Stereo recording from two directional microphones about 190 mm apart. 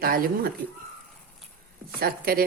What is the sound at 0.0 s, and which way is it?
Speech, 50° right (ahead or behind).